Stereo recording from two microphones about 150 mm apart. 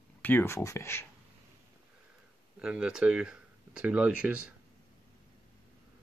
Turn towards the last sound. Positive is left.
turn(degrees=-5)  # may be behind; listen again after turning